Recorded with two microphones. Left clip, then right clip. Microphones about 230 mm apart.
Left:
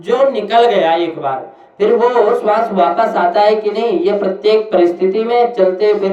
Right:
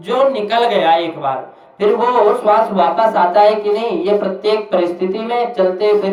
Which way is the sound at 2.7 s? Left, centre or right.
Centre.